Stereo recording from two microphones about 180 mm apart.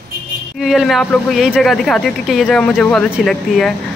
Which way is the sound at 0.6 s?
Centre (ahead or behind).